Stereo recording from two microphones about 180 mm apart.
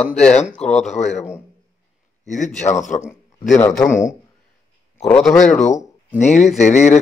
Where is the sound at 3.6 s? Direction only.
15° left (ahead or behind).